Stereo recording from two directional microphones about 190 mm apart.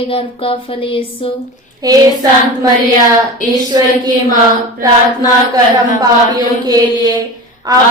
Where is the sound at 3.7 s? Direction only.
20° right (ahead or behind).